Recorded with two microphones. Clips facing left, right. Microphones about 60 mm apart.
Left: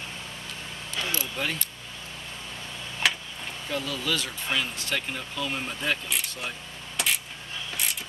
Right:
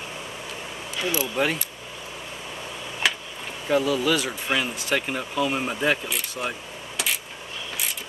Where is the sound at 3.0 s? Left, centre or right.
Centre.